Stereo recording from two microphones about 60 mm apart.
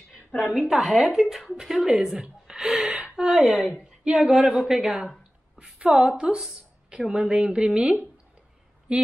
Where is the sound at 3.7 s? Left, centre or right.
Right.